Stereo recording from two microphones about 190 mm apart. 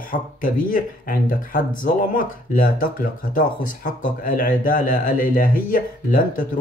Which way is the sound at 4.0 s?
45° left (ahead or behind).